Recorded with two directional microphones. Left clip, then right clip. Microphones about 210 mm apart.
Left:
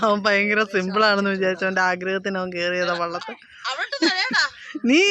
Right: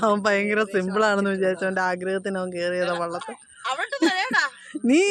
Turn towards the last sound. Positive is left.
turn(degrees=0)  # may be behind; listen again after turning